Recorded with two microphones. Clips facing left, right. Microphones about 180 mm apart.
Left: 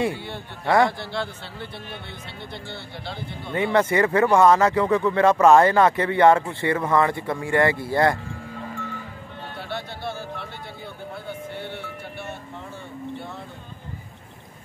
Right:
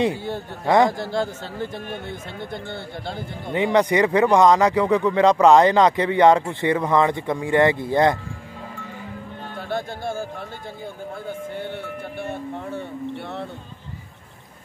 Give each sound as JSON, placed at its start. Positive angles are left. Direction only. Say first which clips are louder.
{"t": 0.1, "sound": "a man's voice", "louder": "right 5 dB", "side_deg": -40}
{"t": 3.5, "sound": "speech", "louder": "right 2 dB", "side_deg": -15}
{"t": 9.7, "sound": "music", "louder": "right 5 dB", "side_deg": -45}
{"t": 12.2, "sound": "vehicle", "louder": "right 8 dB", "side_deg": -55}